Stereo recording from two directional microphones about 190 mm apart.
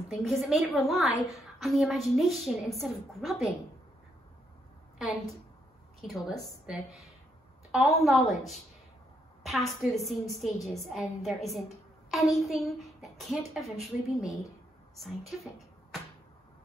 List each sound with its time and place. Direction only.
0.1 s a woman's voice: centre (ahead or behind)
4.9 s a woman's voice: 5° right (ahead or behind)